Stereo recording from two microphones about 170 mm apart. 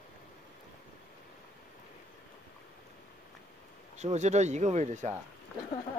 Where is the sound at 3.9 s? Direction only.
40° right (ahead or behind).